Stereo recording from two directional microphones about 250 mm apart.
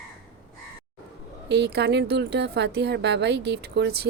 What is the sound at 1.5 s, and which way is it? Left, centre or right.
A woman's voice, right.